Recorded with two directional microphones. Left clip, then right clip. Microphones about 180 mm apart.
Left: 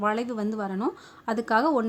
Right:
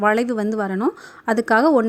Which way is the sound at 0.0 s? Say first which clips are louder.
Right 8 dB; 35° right (ahead or behind).